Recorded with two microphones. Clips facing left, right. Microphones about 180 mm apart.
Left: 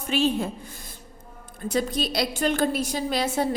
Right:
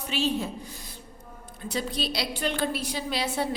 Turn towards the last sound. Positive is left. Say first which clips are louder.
# left 4 dB
turn(degrees=45)  # may be behind; listen again after turning